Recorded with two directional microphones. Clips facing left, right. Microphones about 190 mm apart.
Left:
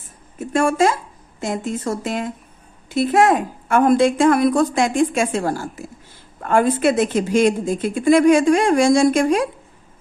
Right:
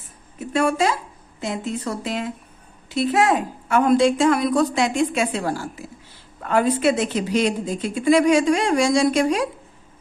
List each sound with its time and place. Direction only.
0.3 s a woman's voice: 50° left (ahead or behind)